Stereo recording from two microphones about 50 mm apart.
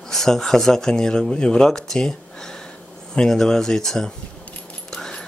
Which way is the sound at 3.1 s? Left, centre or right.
Centre.